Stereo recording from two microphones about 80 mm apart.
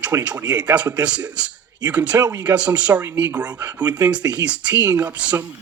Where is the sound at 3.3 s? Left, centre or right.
Centre.